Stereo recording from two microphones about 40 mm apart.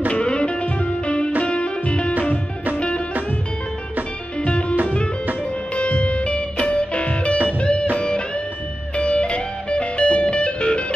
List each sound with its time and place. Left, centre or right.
0.1 s music: left
4.5 s music: left
5.8 s music: left
8.9 s music: left